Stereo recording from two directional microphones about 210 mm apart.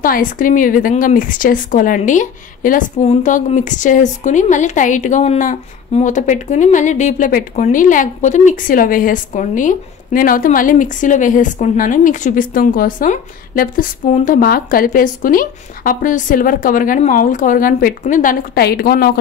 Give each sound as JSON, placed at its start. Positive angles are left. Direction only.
{"t": 0.0, "sound": "speech", "side_deg": 40}